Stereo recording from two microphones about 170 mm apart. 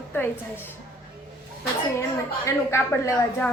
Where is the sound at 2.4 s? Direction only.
15° left (ahead or behind).